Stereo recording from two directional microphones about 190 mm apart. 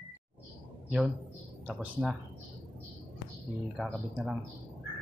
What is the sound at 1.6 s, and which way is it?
Speech, 5° right (ahead or behind).